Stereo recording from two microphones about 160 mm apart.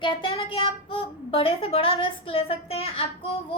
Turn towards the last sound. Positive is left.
turn(degrees=35)  # may be behind; listen again after turning